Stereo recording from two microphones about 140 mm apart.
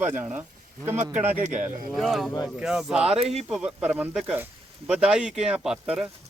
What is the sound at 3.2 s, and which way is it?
Speech, 50° right (ahead or behind).